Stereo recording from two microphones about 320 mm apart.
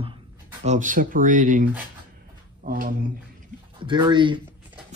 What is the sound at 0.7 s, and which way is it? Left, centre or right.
Speech, right.